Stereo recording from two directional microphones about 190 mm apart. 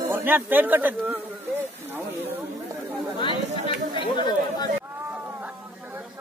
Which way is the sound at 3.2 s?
25° left (ahead or behind).